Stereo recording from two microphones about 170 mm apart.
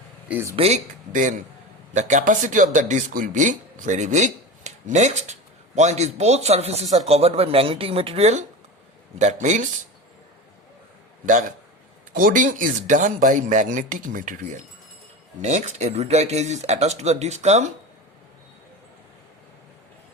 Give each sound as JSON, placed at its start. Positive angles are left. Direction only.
{"t": 0.3, "sound": "speech", "side_deg": -10}
{"t": 0.5, "sound": "speech", "side_deg": -35}
{"t": 1.1, "sound": "speech", "side_deg": -50}
{"t": 11.3, "sound": "speech", "side_deg": -50}